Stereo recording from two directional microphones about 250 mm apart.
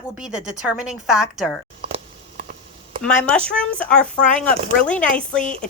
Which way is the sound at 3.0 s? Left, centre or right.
Centre.